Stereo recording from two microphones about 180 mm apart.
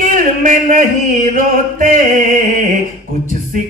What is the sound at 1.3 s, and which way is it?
Speech, 50° right (ahead or behind).